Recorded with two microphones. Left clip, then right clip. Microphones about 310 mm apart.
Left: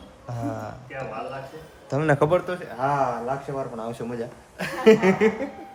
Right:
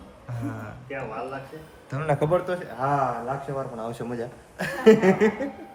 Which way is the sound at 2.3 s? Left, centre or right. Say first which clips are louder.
Left 1 dB; centre.